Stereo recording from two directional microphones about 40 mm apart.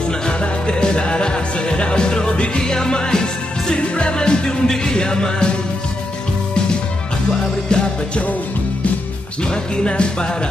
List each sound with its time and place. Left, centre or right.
0.3 s music: left
7.7 s music: centre
9.4 s music: left